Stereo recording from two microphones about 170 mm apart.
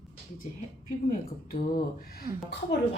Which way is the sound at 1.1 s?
55° left (ahead or behind).